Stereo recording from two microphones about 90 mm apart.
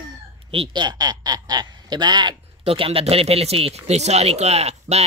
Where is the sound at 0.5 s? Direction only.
85° right.